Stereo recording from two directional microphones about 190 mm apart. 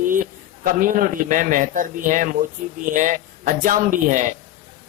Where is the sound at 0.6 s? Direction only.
45° right (ahead or behind).